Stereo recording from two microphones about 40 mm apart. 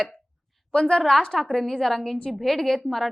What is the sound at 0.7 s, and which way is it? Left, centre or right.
A woman's voice, left.